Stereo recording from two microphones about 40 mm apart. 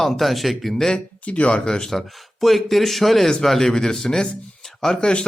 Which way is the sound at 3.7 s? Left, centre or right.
Centre.